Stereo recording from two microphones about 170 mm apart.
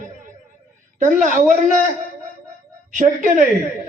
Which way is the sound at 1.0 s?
50° right (ahead or behind).